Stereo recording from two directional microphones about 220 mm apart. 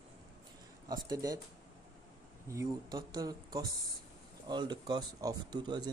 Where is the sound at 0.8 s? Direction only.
20° right (ahead or behind).